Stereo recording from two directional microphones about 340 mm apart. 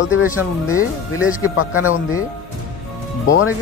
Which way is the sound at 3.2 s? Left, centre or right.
Left.